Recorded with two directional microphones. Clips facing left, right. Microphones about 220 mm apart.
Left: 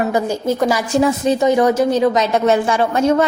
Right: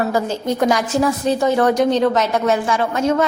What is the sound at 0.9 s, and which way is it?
A woman's voice, 20° left (ahead or behind).